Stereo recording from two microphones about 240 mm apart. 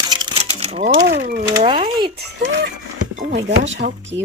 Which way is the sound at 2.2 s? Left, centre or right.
Right.